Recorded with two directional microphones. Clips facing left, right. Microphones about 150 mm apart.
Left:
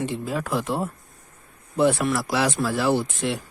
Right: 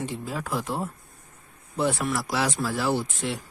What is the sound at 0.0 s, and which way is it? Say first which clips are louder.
Speech: left 5 dB; 70° left (ahead or behind).